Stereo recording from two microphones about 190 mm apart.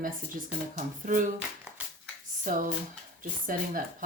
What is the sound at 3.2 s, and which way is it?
Speech, 45° right (ahead or behind).